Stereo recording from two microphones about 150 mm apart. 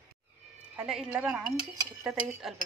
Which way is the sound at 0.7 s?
5° right (ahead or behind).